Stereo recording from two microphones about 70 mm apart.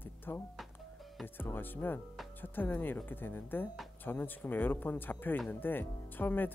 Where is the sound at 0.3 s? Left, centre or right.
Left.